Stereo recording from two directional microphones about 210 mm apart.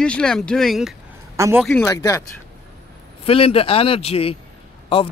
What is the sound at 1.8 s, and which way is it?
Speech, 15° left (ahead or behind).